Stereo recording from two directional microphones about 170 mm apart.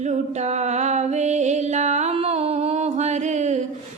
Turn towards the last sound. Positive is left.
turn(degrees=-45)  # may be behind; listen again after turning